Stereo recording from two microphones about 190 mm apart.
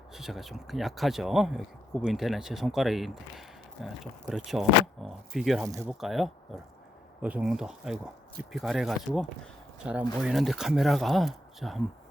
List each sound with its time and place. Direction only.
0.1 s speech: centre (ahead or behind)
5.6 s speech: 15° right (ahead or behind)
5.9 s speech: centre (ahead or behind)